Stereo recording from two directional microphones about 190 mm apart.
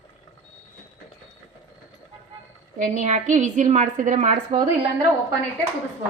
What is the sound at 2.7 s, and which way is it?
A woman's voice, 40° right (ahead or behind).